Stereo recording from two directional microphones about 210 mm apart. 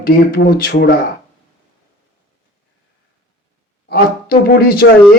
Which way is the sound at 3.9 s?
45° left (ahead or behind).